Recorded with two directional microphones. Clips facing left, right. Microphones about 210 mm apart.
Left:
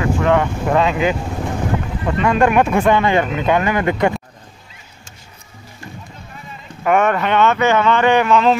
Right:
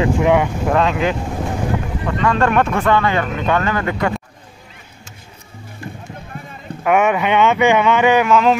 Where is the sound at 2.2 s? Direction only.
15° left (ahead or behind).